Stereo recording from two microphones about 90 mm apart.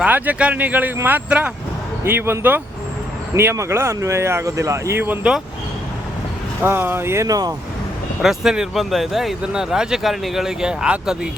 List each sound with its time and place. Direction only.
0.0 s speech: 15° right (ahead or behind)
2.0 s speech: 25° right (ahead or behind)
6.6 s speech: 25° right (ahead or behind)
7.3 s speech: 45° right (ahead or behind)
8.2 s speech: 5° right (ahead or behind)